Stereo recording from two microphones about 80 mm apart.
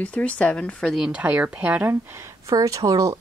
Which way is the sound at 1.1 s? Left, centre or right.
Centre.